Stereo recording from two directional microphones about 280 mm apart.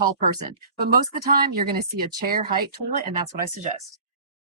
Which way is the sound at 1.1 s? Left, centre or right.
Right.